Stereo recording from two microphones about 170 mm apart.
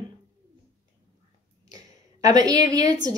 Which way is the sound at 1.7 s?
20° right (ahead or behind).